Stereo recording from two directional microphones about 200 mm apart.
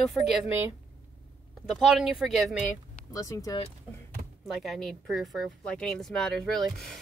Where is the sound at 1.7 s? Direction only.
Centre (ahead or behind).